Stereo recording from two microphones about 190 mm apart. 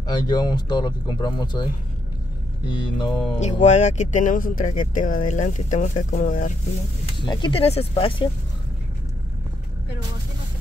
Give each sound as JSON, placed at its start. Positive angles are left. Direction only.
{"t": 0.0, "sound": "speech", "side_deg": 20}
{"t": 3.1, "sound": "a sound", "side_deg": 0}
{"t": 3.3, "sound": "speech", "side_deg": 40}
{"t": 7.2, "sound": "speech", "side_deg": 25}